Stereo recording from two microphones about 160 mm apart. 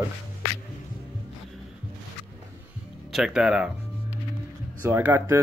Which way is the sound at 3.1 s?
5° right (ahead or behind).